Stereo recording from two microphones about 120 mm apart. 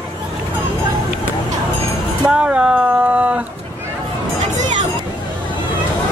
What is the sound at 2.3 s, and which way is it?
Speech, 10° right (ahead or behind).